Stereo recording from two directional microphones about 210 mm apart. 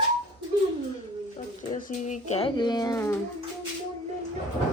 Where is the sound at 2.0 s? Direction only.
30° left (ahead or behind); by 3.1 s 15° left (ahead or behind).